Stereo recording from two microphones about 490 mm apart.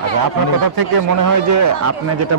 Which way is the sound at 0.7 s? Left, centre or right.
Right.